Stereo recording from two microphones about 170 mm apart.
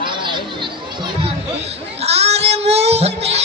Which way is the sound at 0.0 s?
30° right (ahead or behind).